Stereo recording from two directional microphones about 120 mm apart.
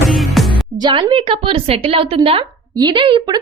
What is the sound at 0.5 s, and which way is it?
Music, 40° right (ahead or behind).